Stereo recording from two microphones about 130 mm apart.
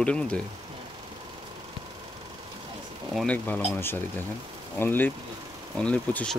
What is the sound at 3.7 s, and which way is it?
Speech, 15° left (ahead or behind).